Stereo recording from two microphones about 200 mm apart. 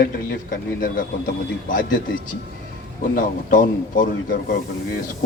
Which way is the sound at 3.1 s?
45° left (ahead or behind).